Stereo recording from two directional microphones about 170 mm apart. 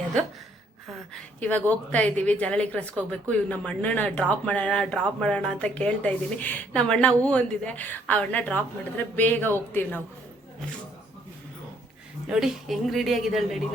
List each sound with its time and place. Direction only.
1.4 s speech: 10° left (ahead or behind)
12.3 s speech: centre (ahead or behind)